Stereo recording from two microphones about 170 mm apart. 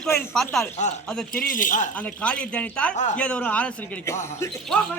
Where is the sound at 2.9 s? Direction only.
45° left (ahead or behind).